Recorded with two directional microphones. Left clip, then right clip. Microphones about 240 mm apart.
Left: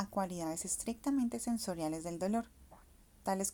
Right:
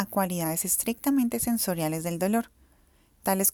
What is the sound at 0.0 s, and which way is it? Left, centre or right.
A woman's voice, right.